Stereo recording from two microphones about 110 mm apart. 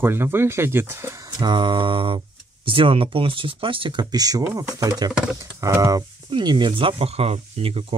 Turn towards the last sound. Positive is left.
turn(degrees=-65)  # may be behind; listen again after turning